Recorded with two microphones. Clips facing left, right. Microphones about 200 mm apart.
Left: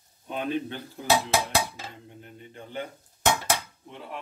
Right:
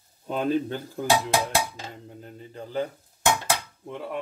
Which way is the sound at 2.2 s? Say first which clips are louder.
Right 6 dB; 35° right (ahead or behind).